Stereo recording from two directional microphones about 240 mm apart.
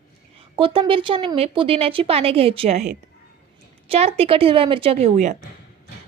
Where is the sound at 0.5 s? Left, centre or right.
Right.